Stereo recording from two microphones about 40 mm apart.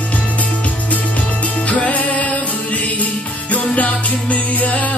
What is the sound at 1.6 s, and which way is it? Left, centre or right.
Music, left.